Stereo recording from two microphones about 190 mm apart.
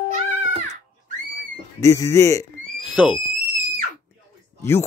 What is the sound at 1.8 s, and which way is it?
Speech, 15° left (ahead or behind).